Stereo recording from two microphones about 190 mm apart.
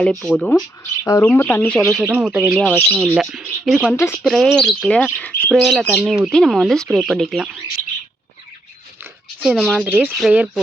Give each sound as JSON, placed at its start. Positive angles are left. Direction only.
{"t": 0.0, "sound": "speech", "side_deg": 10}
{"t": 3.9, "sound": "speech", "side_deg": 15}
{"t": 4.2, "sound": "speech", "side_deg": 0}
{"t": 9.4, "sound": "speech", "side_deg": 0}